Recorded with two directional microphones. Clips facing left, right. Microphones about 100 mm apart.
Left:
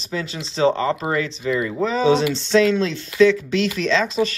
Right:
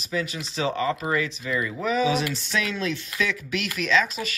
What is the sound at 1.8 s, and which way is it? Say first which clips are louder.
Speech: left 6 dB; 30° left (ahead or behind).